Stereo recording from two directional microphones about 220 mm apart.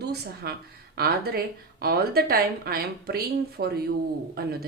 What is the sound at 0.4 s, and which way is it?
A woman's voice, 50° right (ahead or behind).